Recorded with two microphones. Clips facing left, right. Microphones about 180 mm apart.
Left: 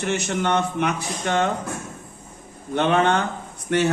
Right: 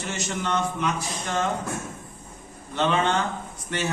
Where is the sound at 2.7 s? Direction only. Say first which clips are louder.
Left 4 dB; 60° left (ahead or behind).